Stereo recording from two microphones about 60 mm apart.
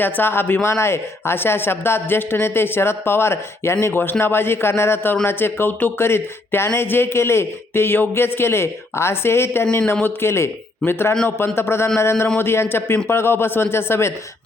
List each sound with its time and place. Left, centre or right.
0.0 s speech: left
9.7 s speech: left